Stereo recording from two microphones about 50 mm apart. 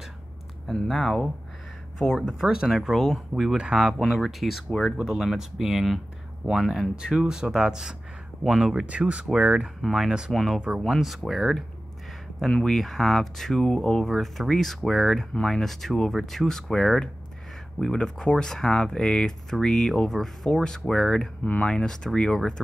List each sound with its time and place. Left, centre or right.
0.8 s speech: centre
2.4 s speech: centre
4.8 s speech: centre
8.8 s speech: right
9.8 s speech: centre
10.0 s speech: centre
10.3 s speech: centre
12.4 s speech: centre
14.0 s speech: centre
15.3 s speech: centre